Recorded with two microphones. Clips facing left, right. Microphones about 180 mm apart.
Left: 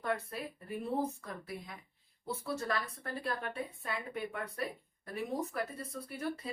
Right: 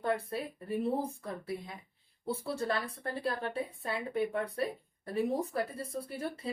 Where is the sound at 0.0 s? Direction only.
30° right (ahead or behind).